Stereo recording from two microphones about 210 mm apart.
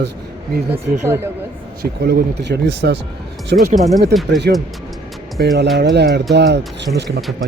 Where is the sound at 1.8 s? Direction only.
50° right (ahead or behind).